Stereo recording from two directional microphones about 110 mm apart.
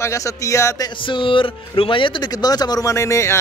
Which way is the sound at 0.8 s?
50° left (ahead or behind).